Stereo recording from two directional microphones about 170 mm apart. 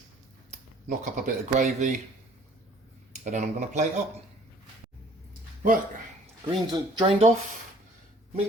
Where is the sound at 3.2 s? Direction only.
45° right (ahead or behind).